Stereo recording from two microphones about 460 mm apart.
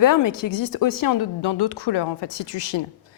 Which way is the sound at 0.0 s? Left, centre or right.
Left.